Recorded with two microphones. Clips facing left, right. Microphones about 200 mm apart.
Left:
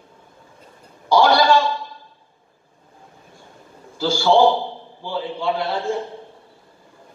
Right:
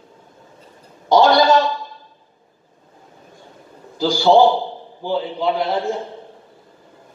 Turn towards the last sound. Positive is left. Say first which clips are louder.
# right 2 dB
turn(degrees=-20)  # may be behind; listen again after turning